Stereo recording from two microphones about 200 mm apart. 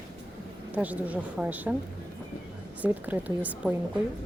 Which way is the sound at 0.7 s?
10° right (ahead or behind).